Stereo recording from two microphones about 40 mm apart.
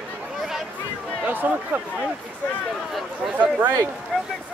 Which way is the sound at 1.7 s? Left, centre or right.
Right.